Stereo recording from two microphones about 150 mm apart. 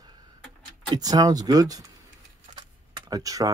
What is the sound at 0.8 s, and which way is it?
Speech, 25° right (ahead or behind).